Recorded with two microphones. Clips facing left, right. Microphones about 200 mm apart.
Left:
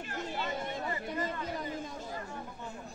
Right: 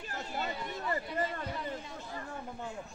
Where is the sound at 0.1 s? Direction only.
45° right (ahead or behind).